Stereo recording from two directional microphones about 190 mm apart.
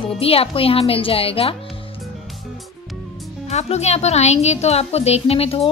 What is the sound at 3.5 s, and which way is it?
A woman's voice, 35° left (ahead or behind).